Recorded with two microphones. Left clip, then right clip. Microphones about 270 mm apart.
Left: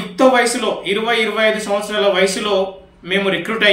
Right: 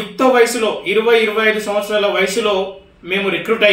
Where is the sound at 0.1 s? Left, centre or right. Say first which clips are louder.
Even; centre.